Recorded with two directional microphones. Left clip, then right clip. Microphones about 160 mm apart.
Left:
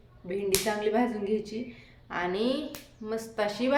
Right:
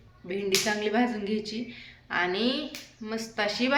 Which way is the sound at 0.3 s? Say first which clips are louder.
Right 1 dB; centre (ahead or behind).